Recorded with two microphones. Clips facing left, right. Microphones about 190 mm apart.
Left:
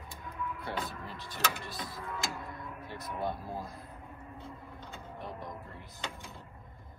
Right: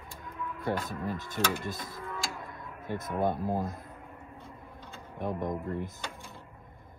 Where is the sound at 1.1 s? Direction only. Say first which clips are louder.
Right 6 dB; 50° right (ahead or behind).